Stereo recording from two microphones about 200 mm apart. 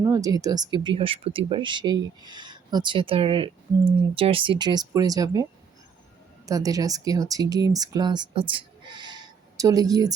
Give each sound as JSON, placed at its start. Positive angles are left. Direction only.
{"t": 0.0, "sound": "speech", "side_deg": -15}